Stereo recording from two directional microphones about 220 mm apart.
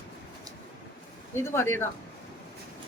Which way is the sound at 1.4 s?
10° left (ahead or behind).